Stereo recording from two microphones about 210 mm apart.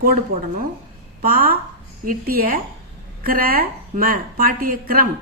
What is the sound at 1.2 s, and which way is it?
A woman's voice, 45° right (ahead or behind).